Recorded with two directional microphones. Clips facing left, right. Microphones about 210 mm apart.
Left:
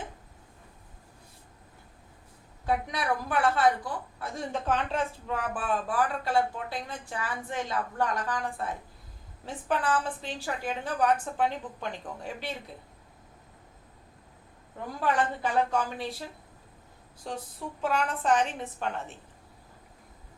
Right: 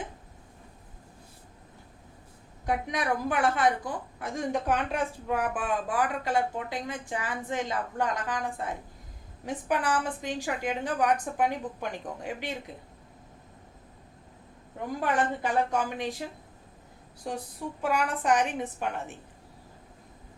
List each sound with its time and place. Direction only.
2.6 s a woman's voice: 15° right (ahead or behind)
15.0 s a woman's voice: 15° right (ahead or behind)
17.2 s a woman's voice: 10° right (ahead or behind)